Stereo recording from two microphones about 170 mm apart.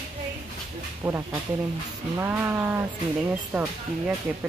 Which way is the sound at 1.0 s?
15° right (ahead or behind).